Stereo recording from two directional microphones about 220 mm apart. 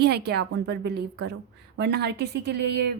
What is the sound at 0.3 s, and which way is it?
A woman's voice, 50° right (ahead or behind).